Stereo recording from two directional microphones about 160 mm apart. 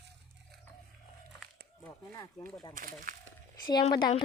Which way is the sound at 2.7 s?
60° right (ahead or behind).